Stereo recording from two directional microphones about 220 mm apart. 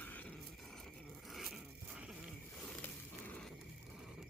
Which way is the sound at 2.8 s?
5° left (ahead or behind).